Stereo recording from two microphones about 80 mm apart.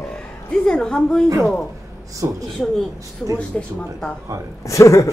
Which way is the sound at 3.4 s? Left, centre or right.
Centre.